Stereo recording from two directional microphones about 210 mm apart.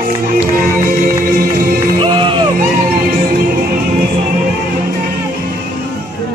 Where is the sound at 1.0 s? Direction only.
45° right (ahead or behind).